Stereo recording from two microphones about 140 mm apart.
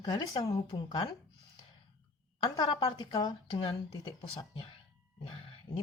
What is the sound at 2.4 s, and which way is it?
A woman's voice, 40° left (ahead or behind).